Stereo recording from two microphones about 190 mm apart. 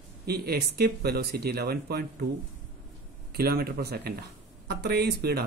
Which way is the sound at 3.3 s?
55° right (ahead or behind).